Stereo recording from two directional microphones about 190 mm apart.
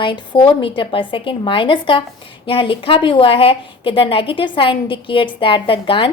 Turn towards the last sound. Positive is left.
turn(degrees=30)  # may be behind; listen again after turning